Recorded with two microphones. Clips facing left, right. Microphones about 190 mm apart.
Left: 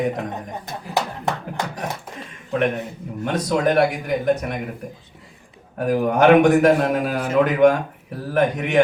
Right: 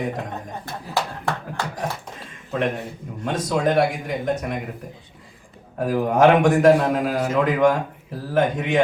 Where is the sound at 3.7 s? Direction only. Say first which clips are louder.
Left 2 dB; 65° left (ahead or behind).